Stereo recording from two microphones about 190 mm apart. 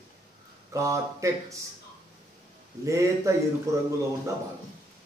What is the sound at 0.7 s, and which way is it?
Speech, 15° right (ahead or behind).